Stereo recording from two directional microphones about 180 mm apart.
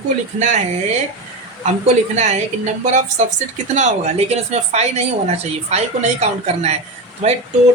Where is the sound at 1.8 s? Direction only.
40° right (ahead or behind).